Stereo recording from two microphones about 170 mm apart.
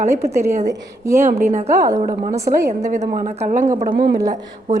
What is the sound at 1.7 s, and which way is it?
Speech, 20° right (ahead or behind).